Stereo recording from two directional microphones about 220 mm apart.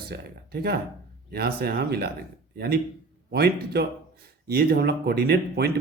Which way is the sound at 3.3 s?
45° right (ahead or behind).